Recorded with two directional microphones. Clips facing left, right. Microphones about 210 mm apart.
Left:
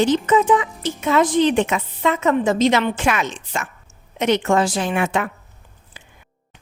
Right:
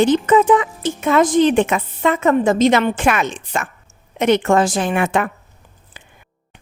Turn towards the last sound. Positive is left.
turn(degrees=-55)  # may be behind; listen again after turning